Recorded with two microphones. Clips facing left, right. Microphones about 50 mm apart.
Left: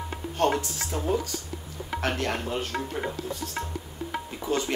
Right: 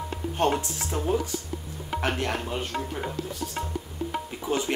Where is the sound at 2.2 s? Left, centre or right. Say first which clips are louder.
Even; centre.